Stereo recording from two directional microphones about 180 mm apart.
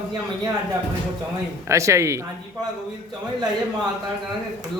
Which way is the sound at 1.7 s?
15° right (ahead or behind).